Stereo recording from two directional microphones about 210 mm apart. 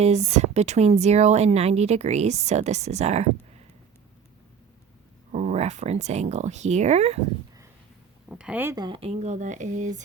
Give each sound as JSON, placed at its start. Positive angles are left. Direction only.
{"t": 0.0, "sound": "speech", "side_deg": -30}
{"t": 5.3, "sound": "speech", "side_deg": -35}
{"t": 8.3, "sound": "speech", "side_deg": -5}
{"t": 8.7, "sound": "speech", "side_deg": -20}